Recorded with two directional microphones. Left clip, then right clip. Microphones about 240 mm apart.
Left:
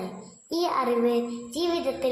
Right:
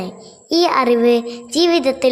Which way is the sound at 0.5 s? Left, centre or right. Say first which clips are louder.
Right 11 dB; right.